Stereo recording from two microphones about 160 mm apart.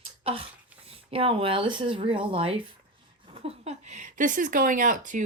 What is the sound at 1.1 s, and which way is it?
A woman's voice, 35° right (ahead or behind).